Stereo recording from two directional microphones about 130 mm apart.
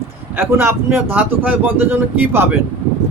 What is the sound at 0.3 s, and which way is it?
Speech, 20° right (ahead or behind).